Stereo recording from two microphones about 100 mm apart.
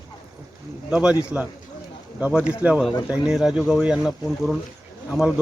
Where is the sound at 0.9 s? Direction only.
10° right (ahead or behind).